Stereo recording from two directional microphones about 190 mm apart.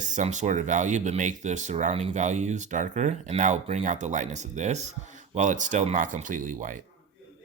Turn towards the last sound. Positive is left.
turn(degrees=-40)  # may be behind; listen again after turning